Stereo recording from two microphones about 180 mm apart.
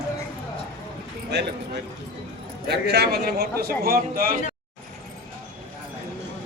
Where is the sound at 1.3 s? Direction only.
70° right (ahead or behind).